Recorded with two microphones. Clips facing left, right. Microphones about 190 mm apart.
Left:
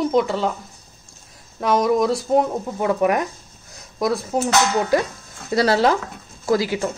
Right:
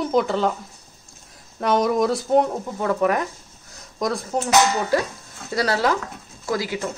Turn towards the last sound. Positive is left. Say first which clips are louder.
# left 5 dB
turn(degrees=30)  # may be behind; listen again after turning